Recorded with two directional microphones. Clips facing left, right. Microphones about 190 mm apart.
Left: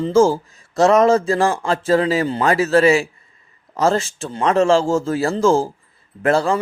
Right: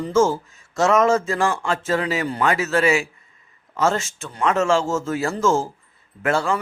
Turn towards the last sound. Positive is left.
turn(degrees=35)  # may be behind; listen again after turning